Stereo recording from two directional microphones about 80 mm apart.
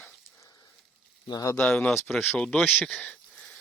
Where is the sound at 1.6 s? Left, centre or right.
Centre.